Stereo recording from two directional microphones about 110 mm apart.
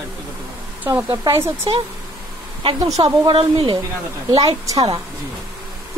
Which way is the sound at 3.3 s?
50° right (ahead or behind).